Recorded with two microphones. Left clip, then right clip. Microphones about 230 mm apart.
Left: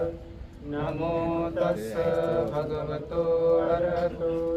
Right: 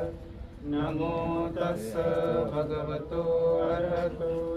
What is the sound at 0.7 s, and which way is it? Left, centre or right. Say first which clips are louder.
Mantra: left 1 dB; centre.